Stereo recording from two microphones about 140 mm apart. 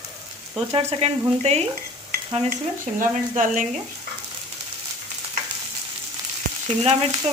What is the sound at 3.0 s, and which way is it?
Speech, 65° right (ahead or behind).